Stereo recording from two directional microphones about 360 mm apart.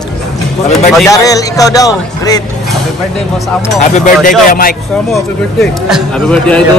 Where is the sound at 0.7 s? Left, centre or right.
Centre.